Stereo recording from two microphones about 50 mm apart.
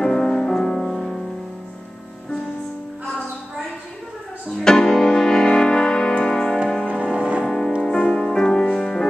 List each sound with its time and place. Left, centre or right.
0.0 s music: centre
4.5 s music: centre
7.1 s music: right
7.4 s music: centre